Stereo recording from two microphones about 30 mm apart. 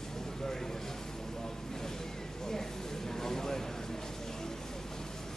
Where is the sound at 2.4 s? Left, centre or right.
Centre.